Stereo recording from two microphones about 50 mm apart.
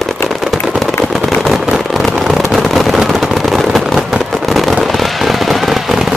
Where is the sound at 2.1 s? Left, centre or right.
Centre.